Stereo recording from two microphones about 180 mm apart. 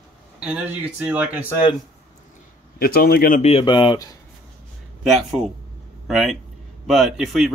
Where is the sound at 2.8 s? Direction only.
60° left (ahead or behind).